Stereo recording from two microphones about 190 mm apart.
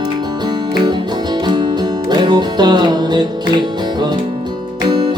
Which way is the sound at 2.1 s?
20° right (ahead or behind).